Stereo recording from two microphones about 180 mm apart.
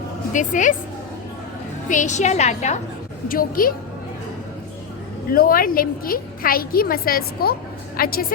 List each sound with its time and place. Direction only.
0.3 s a woman's voice: 45° left (ahead or behind)
1.9 s a woman's voice: 40° left (ahead or behind)
3.2 s a woman's voice: 50° left (ahead or behind)
5.3 s a woman's voice: 55° left (ahead or behind)